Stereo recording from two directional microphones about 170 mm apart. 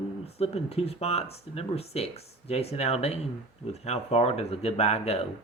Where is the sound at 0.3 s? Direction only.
35° left (ahead or behind).